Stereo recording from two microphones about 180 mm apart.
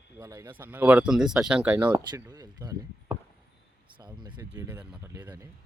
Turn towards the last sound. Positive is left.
turn(degrees=-10)  # may be behind; listen again after turning